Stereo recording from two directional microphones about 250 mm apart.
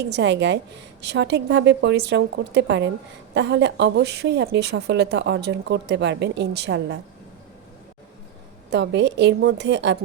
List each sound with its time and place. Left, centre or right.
0.1 s a woman's voice: right
8.7 s a woman's voice: right